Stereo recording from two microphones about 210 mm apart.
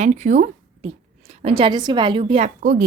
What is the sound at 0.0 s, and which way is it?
A woman's voice, 35° right (ahead or behind).